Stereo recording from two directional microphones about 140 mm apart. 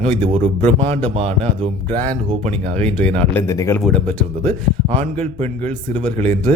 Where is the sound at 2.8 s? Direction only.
10° left (ahead or behind).